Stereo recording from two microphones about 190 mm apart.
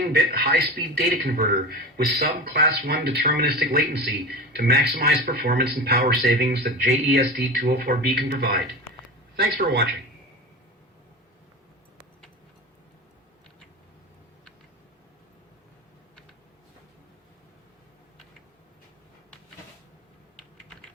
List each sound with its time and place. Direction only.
0.1 s speech: 55° right (ahead or behind)